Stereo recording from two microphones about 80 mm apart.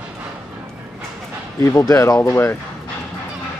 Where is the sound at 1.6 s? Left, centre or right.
Left.